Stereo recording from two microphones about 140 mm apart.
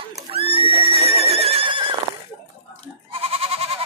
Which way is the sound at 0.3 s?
45° right (ahead or behind).